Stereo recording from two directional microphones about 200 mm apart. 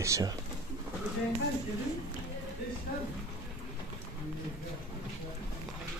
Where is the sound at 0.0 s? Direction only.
15° right (ahead or behind).